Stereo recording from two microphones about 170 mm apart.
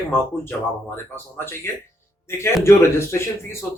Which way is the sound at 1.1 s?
15° left (ahead or behind).